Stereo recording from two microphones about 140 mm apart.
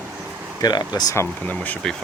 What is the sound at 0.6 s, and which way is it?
Speech, 30° left (ahead or behind).